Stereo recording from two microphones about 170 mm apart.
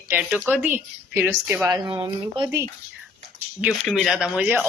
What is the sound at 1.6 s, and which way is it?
Speech, 25° right (ahead or behind).